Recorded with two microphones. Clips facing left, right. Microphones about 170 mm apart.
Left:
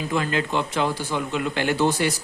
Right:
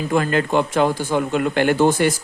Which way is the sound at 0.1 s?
50° right (ahead or behind).